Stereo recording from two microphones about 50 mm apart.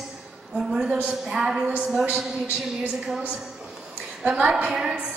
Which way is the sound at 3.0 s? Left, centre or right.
Centre.